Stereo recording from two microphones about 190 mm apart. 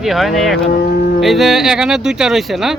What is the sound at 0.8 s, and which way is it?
Cattle, 50° left (ahead or behind).